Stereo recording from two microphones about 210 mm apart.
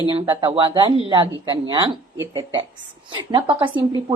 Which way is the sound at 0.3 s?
20° right (ahead or behind).